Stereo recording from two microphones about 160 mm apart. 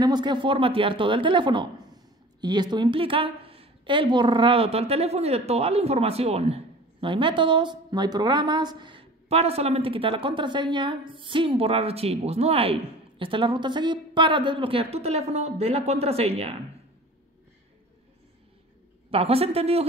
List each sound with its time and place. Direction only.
0.0 s a woman's voice: 25° right (ahead or behind)
19.0 s a woman's voice: 40° right (ahead or behind)